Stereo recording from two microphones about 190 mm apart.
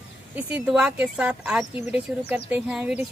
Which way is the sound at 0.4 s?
5° right (ahead or behind).